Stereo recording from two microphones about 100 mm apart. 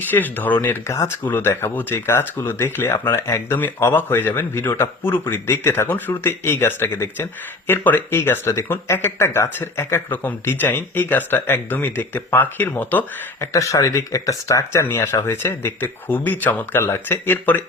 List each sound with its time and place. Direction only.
0.1 s speech: 20° left (ahead or behind)
13.4 s speech: 30° left (ahead or behind)
14.8 s speech: 20° left (ahead or behind)